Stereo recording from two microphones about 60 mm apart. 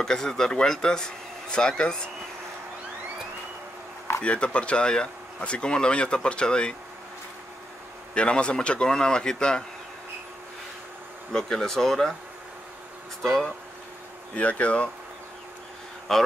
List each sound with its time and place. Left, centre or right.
0.0 s speech: centre
4.2 s speech: centre
8.1 s speech: centre
11.3 s speech: centre
13.2 s speech: centre
14.3 s speech: left
16.1 s speech: centre